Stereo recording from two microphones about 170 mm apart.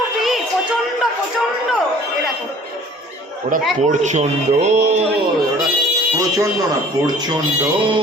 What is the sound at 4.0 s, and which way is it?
Speech, 45° right (ahead or behind).